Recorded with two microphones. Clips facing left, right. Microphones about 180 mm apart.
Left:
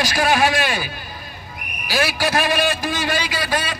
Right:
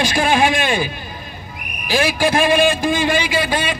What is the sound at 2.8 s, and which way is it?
Speech, 25° right (ahead or behind).